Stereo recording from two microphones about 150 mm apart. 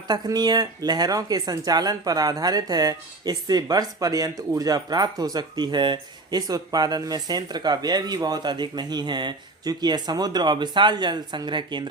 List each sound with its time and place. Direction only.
0.1 s speech: 25° right (ahead or behind)